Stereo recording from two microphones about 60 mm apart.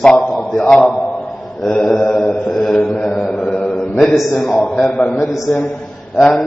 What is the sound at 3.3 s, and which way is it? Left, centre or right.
Mantra, left.